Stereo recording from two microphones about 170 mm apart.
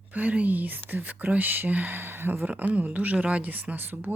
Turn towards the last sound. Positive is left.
turn(degrees=-10)  # may be behind; listen again after turning